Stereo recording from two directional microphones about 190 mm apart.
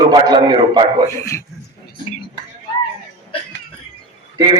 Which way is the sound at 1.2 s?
15° left (ahead or behind).